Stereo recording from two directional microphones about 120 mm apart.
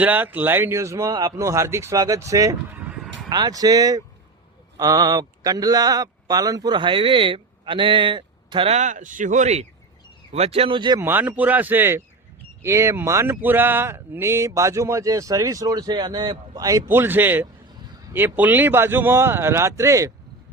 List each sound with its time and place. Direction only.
0.0 s speech: 15° right (ahead or behind)
2.7 s a sound: 15° right (ahead or behind)
3.2 s speech: 35° right (ahead or behind)
8.7 s speech: 85° right
10.3 s speech: 55° right (ahead or behind); by 11.0 s 40° right (ahead or behind)
11.0 s speech: 15° right (ahead or behind)